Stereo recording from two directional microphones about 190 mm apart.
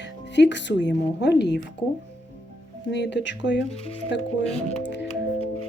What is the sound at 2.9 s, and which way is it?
Speech, 65° left (ahead or behind).